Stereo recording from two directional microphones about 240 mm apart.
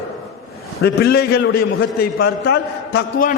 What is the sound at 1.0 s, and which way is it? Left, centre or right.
A man's voice, left.